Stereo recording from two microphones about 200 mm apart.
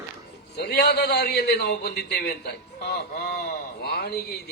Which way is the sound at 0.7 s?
55° left (ahead or behind).